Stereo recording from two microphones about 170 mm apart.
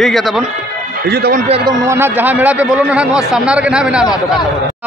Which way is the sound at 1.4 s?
35° right (ahead or behind).